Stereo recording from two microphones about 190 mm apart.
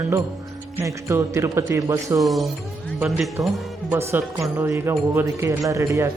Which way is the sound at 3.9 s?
10° right (ahead or behind).